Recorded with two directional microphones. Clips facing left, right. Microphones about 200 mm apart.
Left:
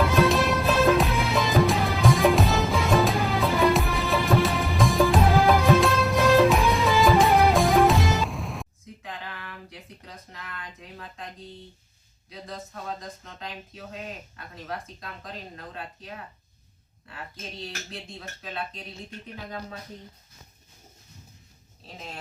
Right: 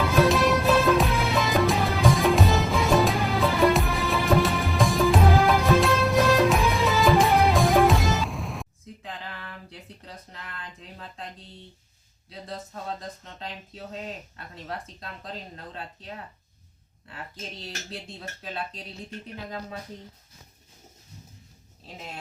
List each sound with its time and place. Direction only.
0.0 s music: centre (ahead or behind)